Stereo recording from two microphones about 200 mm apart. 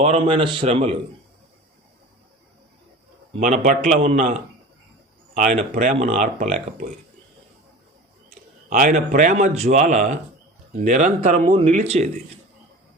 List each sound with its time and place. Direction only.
0.0 s a man's voice: 30° right (ahead or behind)
3.4 s speech: 40° right (ahead or behind)
5.3 s speech: 40° right (ahead or behind)
8.7 s speech: 40° right (ahead or behind)